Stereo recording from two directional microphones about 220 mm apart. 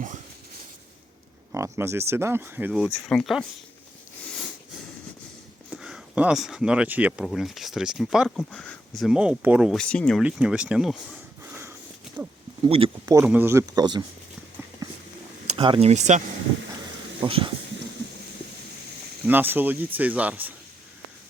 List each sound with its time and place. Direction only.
1.5 s speech: 15° right (ahead or behind)
5.7 s speech: 5° right (ahead or behind)
12.6 s speech: 25° right (ahead or behind)
13.1 s speech: 10° right (ahead or behind)
15.5 s speech: 25° right (ahead or behind)
19.2 s speech: 10° right (ahead or behind)